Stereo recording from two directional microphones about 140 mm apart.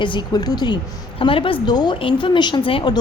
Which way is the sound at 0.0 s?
35° left (ahead or behind).